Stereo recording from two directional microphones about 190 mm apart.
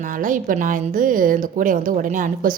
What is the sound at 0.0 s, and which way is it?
A woman's voice, 45° right (ahead or behind).